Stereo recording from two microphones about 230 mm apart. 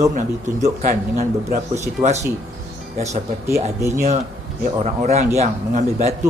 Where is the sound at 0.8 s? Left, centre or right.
Right.